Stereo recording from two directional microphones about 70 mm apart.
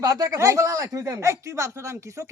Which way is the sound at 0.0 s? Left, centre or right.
Right.